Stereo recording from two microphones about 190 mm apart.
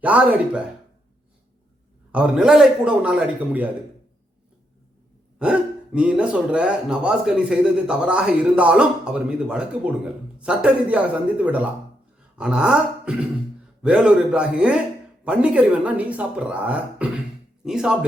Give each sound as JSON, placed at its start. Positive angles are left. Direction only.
{"t": 0.0, "sound": "speech", "side_deg": -5}
{"t": 2.1, "sound": "speech", "side_deg": -5}
{"t": 5.4, "sound": "speech", "side_deg": -5}